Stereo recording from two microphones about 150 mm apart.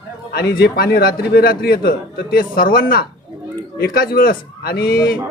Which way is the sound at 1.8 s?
75° left (ahead or behind).